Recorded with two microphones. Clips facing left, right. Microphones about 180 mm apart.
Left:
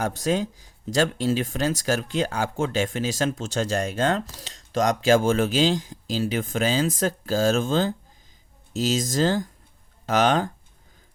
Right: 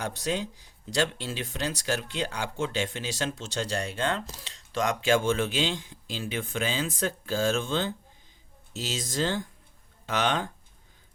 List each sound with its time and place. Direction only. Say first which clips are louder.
0.3 s speech: left 6 dB; 45° left (ahead or behind)